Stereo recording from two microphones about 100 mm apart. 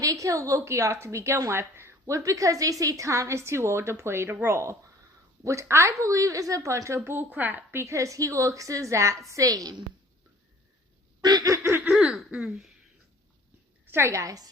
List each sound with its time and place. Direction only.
0.0 s a woman's voice: 35° right (ahead or behind)
11.2 s laughter: 40° right (ahead or behind)
11.8 s throat clearing: 10° right (ahead or behind)
13.8 s a woman's voice: 25° right (ahead or behind)